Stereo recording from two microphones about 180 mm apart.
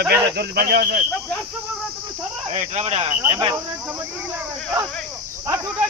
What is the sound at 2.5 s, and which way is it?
Speech, 40° right (ahead or behind).